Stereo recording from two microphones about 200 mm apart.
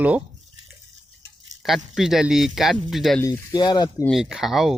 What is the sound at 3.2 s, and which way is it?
Speech, 20° left (ahead or behind).